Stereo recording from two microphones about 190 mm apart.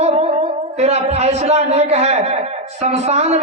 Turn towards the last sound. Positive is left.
turn(degrees=-35)  # may be behind; listen again after turning